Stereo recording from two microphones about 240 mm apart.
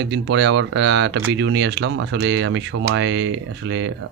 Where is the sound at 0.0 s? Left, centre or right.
Right.